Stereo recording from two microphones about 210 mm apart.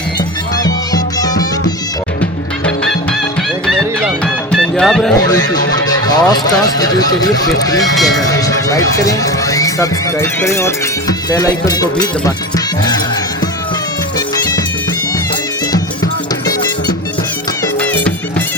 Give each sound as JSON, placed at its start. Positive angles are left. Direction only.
{"t": 0.6, "sound": "music", "side_deg": 20}
{"t": 4.5, "sound": "music", "side_deg": 0}
{"t": 5.8, "sound": "speech", "side_deg": 20}
{"t": 17.7, "sound": "music", "side_deg": 5}